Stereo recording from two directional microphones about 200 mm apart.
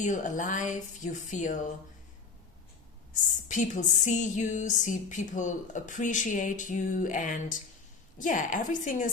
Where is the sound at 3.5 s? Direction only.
40° left (ahead or behind).